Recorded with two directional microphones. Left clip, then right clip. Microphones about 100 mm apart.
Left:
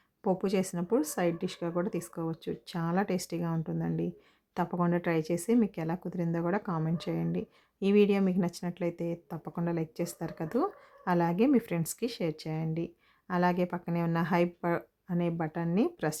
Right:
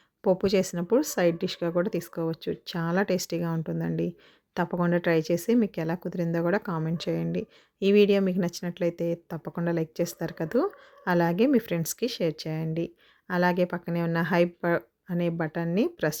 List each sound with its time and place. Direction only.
0.2 s speech: 25° right (ahead or behind)